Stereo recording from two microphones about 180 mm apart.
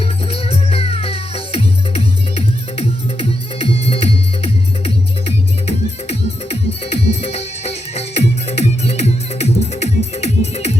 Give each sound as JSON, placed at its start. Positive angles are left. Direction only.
{"t": 0.0, "sound": "music", "side_deg": 30}